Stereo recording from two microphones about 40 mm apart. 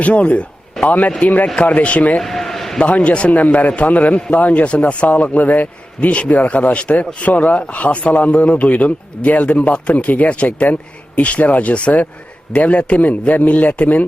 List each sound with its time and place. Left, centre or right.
0.0 s speech: left
2.2 s a sound: centre
2.8 s speech: left
4.6 s speech: left
6.1 s speech: left